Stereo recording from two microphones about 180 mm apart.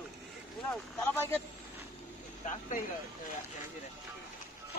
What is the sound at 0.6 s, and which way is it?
Speech, centre (ahead or behind).